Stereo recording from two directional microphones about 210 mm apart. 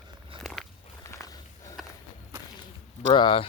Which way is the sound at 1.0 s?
15° left (ahead or behind).